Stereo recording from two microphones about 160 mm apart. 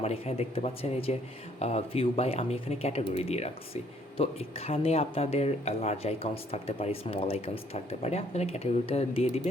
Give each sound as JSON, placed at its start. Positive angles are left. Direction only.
{"t": 0.0, "sound": "speech", "side_deg": 40}